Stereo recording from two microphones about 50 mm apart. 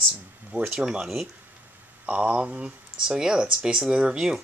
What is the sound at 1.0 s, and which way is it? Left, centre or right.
Speech, centre.